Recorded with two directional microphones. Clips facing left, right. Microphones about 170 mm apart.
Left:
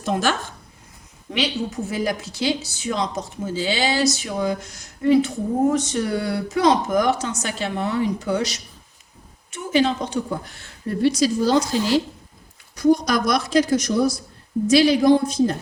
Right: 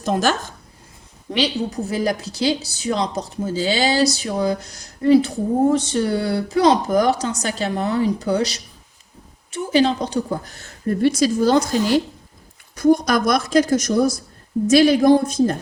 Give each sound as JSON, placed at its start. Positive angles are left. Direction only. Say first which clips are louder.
{"t": 0.0, "sound": "speech", "louder": "right 2 dB", "side_deg": -40}